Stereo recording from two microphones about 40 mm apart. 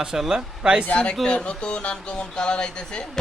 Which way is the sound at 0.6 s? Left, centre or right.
Right.